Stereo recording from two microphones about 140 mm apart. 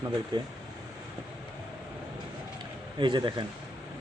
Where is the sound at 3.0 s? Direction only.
35° right (ahead or behind).